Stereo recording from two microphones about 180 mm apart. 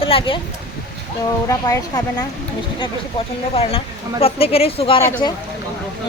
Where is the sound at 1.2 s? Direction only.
20° left (ahead or behind).